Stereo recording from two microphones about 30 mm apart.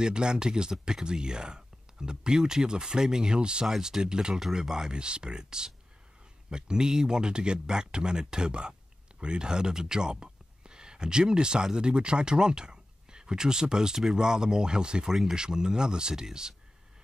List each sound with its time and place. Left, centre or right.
0.0 s speech: right
4.4 s speech: centre
4.9 s speech: right